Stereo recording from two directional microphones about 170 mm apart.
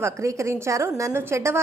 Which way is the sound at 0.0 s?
15° right (ahead or behind).